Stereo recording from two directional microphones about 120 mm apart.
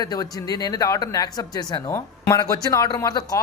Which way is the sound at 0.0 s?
35° left (ahead or behind).